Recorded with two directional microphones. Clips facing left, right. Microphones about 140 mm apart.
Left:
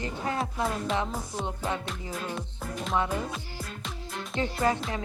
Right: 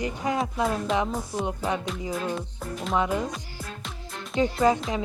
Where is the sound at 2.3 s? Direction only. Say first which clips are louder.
Right 2 dB; centre (ahead or behind).